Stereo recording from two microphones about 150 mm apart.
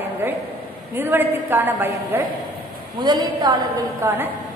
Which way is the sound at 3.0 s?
30° right (ahead or behind).